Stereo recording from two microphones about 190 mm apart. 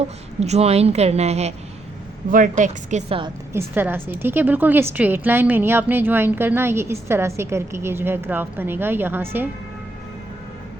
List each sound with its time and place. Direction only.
0.3 s a woman's voice: 35° right (ahead or behind)
3.5 s a woman's voice: 10° right (ahead or behind)